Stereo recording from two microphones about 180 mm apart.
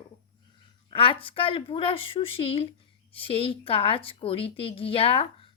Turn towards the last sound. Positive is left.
turn(degrees=30)  # may be behind; listen again after turning